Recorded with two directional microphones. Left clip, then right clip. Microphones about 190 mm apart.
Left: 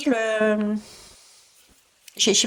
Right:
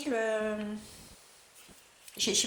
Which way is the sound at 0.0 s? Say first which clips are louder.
Left 9 dB; 55° left (ahead or behind).